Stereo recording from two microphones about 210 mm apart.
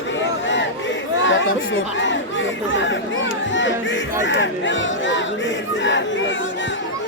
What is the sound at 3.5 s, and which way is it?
Music, 60° left (ahead or behind).